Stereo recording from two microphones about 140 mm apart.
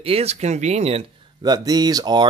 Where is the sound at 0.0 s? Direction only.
45° right (ahead or behind).